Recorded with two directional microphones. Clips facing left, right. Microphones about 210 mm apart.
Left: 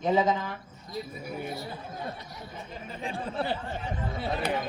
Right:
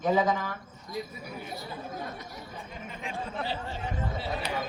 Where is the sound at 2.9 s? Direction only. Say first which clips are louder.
Left 3 dB; 35° left (ahead or behind).